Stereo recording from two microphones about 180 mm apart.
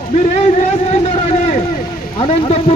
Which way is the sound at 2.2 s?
35° left (ahead or behind).